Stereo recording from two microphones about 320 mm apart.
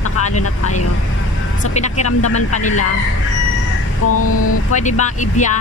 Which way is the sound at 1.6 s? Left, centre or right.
Left.